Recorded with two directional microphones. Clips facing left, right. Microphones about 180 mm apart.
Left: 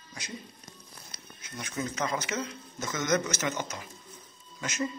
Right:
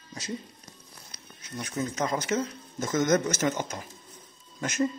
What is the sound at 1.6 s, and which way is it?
Speech, 40° right (ahead or behind).